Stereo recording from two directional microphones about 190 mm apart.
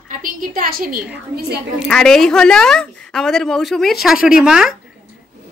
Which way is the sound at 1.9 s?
5° left (ahead or behind).